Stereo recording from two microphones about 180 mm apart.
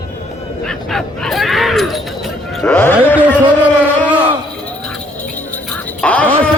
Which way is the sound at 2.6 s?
10° left (ahead or behind).